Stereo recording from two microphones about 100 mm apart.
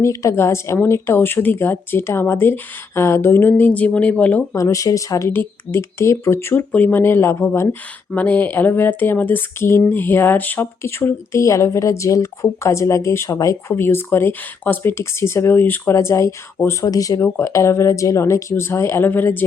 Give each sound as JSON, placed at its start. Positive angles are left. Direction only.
{"t": 0.0, "sound": "speech", "side_deg": 30}
{"t": 4.5, "sound": "speech", "side_deg": 35}